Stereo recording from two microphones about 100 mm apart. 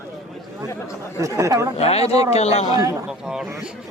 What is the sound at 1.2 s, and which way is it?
Speech, 30° right (ahead or behind).